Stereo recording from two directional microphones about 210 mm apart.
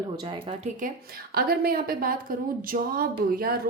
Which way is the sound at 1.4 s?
45° right (ahead or behind).